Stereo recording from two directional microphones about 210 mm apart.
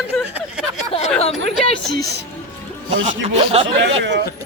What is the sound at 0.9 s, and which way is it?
Speech, 30° left (ahead or behind).